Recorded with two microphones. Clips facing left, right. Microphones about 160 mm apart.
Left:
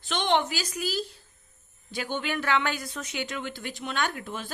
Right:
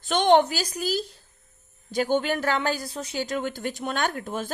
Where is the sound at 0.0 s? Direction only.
45° right (ahead or behind).